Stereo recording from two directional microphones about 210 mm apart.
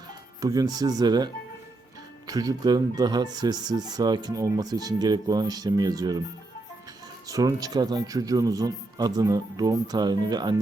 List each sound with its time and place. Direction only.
0.4 s speech: 15° right (ahead or behind)
7.3 s speech: 15° right (ahead or behind)